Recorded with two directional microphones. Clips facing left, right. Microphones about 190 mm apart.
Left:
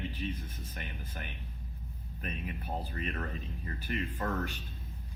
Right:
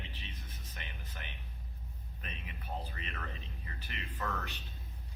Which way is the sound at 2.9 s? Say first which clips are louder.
Left 8 dB; 45° left (ahead or behind).